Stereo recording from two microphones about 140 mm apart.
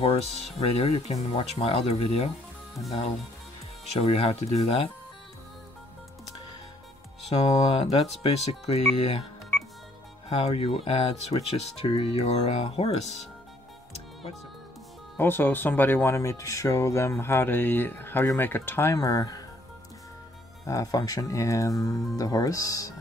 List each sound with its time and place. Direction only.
0.0 s speech: 45° left (ahead or behind)
3.8 s speech: 50° left (ahead or behind)
7.5 s speech: 50° left (ahead or behind)
10.3 s speech: 45° left (ahead or behind)
15.1 s speech: 15° left (ahead or behind)
20.6 s speech: 25° left (ahead or behind)